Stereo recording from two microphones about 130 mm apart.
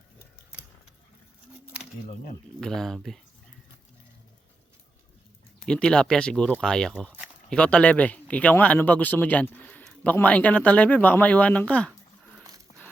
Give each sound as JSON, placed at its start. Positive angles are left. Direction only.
{"t": 2.6, "sound": "speech", "side_deg": 5}
{"t": 5.6, "sound": "speech", "side_deg": 5}
{"t": 12.4, "sound": "dog", "side_deg": -25}